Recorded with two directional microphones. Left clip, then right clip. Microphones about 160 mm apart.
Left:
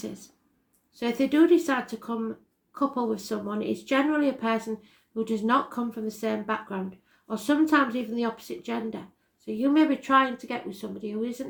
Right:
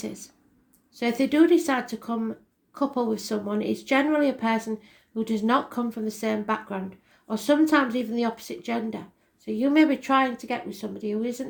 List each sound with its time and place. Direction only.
0.0 s speech: 40° right (ahead or behind)